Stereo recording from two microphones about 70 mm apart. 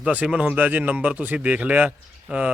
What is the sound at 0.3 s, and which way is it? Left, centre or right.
Speech, centre.